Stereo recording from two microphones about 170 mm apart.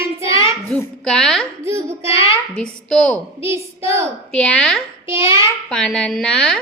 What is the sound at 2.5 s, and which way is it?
Speech, 5° left (ahead or behind).